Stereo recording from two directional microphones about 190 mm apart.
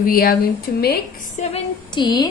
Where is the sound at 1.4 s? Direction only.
40° left (ahead or behind).